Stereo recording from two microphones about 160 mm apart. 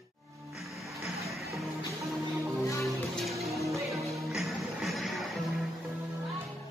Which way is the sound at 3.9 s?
Centre (ahead or behind).